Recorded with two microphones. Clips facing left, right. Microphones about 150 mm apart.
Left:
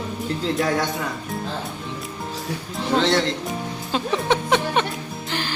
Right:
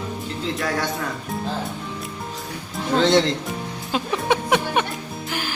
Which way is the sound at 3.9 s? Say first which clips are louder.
Even; 10° right (ahead or behind).